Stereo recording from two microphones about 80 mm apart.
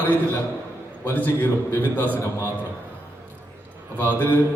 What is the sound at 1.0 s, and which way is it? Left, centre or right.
Mantra, left.